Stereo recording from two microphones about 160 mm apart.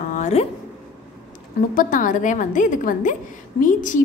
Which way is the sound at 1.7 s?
55° left (ahead or behind).